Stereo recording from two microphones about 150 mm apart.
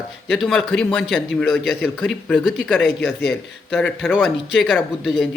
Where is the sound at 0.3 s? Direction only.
5° left (ahead or behind).